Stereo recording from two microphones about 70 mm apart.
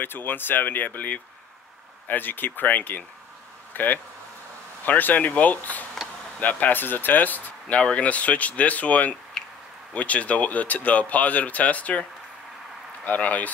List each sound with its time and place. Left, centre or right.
0.0 s speech: left